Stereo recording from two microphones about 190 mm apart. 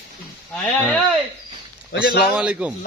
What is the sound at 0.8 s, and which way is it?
Speech, 5° left (ahead or behind).